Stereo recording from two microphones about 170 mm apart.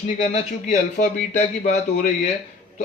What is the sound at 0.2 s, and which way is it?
Speech, 45° left (ahead or behind).